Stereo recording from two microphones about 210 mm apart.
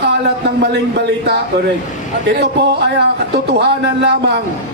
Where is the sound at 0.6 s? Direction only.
50° right (ahead or behind).